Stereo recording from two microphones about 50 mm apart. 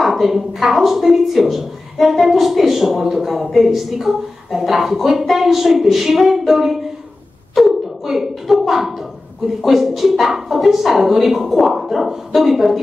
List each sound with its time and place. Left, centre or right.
0.0 s a woman's voice: centre